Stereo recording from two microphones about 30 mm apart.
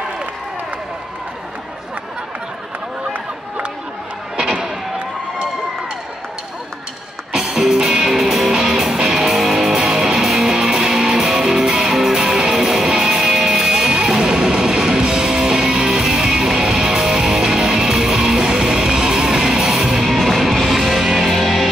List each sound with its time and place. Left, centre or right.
7.3 s music: centre
9.4 s music: centre; by 11.2 s right
11.3 s music: centre
13.7 s music: right
20.1 s music: centre